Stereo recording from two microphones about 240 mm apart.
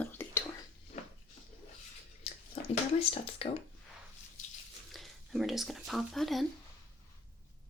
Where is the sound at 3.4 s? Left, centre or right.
Left.